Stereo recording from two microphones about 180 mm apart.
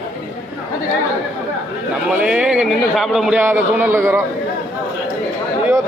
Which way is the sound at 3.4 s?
10° right (ahead or behind).